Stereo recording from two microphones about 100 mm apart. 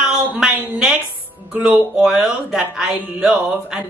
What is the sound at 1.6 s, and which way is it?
Speech, 10° right (ahead or behind).